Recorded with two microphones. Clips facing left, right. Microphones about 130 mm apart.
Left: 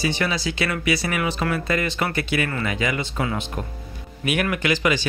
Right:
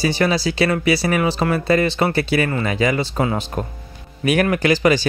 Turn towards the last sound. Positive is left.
turn(degrees=-35)  # may be behind; listen again after turning